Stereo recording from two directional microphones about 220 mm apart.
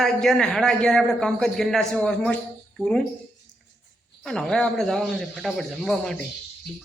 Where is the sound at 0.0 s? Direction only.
Centre (ahead or behind).